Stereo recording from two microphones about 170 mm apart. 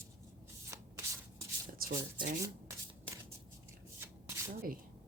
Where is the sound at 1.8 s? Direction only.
60° right (ahead or behind).